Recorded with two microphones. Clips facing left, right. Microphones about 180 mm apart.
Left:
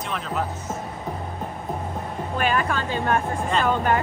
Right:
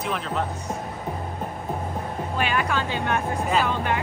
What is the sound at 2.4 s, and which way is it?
Speech, 40° left (ahead or behind).